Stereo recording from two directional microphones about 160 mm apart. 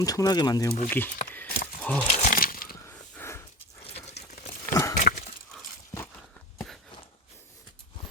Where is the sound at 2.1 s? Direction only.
50° left (ahead or behind).